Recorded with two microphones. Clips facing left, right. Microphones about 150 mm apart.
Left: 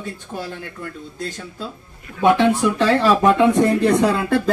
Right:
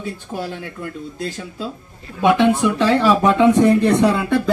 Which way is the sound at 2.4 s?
Centre (ahead or behind).